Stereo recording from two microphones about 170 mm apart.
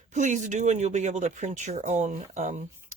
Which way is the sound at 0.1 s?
45° right (ahead or behind).